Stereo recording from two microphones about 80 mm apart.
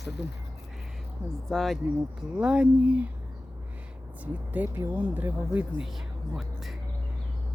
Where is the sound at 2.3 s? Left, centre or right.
Centre.